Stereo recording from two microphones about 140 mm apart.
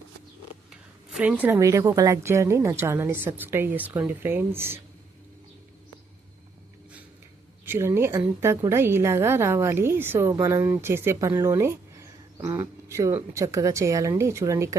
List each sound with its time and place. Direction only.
0.7 s a sound: 5° right (ahead or behind)
1.5 s a woman's voice: 20° right (ahead or behind)
7.6 s a woman's voice: 15° right (ahead or behind)